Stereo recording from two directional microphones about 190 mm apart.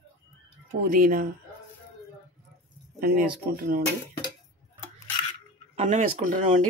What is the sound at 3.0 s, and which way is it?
Speech, 50° right (ahead or behind).